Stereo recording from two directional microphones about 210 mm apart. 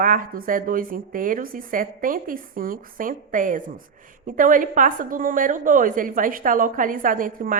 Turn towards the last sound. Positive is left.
turn(degrees=-40)  # may be behind; listen again after turning